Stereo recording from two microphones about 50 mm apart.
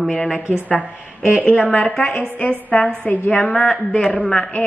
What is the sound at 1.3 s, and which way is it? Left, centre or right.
Speech, centre.